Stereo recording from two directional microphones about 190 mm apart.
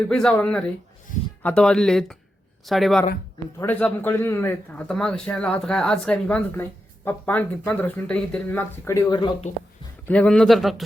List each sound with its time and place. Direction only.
0.1 s a man's voice: 5° left (ahead or behind); by 9.3 s 20° left (ahead or behind)
10.1 s speech: 5° left (ahead or behind)